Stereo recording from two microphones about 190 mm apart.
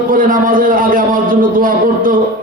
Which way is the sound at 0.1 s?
45° right (ahead or behind).